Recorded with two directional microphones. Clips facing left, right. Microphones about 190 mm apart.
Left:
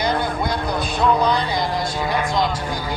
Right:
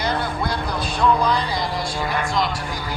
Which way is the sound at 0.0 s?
20° left (ahead or behind).